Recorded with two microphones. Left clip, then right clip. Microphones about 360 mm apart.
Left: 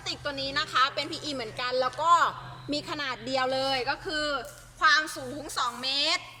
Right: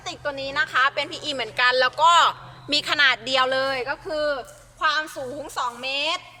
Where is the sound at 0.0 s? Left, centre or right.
Centre.